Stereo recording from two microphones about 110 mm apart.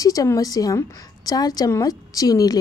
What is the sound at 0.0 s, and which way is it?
A woman's voice, 30° left (ahead or behind).